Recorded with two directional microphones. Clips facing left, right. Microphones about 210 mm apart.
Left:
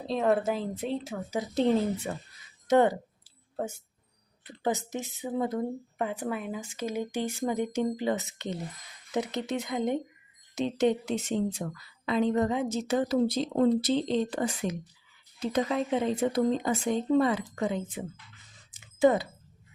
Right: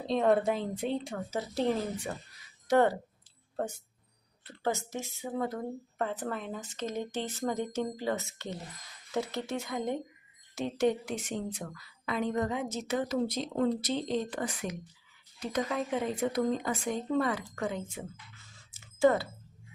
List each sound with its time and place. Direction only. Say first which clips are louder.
0.0 s a woman's voice: even; centre (ahead or behind); by 3.0 s 20° left (ahead or behind)
4.4 s a woman's voice: left 3 dB; 15° left (ahead or behind)
18.5 s a sound: even; 15° left (ahead or behind)